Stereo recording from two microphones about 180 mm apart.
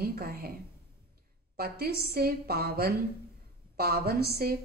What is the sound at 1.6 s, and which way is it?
A woman's voice, 60° right (ahead or behind).